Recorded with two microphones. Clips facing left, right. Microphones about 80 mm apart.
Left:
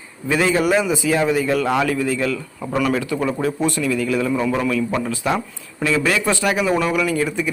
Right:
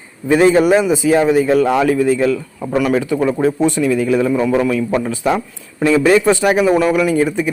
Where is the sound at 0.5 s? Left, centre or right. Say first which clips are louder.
Right 6 dB; right.